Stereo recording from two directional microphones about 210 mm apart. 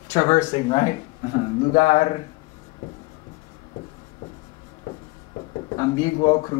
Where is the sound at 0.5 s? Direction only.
20° left (ahead or behind).